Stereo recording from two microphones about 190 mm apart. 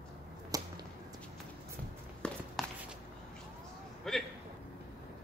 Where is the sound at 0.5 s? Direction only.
20° right (ahead or behind).